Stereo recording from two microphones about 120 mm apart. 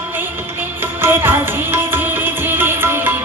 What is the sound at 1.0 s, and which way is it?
Music, 20° right (ahead or behind).